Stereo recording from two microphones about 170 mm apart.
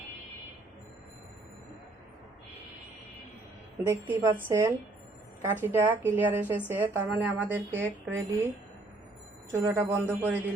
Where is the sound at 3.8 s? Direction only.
15° right (ahead or behind).